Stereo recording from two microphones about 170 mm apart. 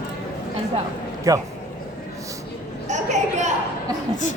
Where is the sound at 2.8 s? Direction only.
45° right (ahead or behind).